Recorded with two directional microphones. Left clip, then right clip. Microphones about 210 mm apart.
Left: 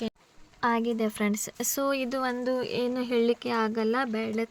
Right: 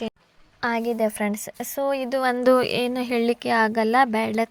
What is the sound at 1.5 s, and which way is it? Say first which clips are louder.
Speech: right 4 dB; 10° left (ahead or behind).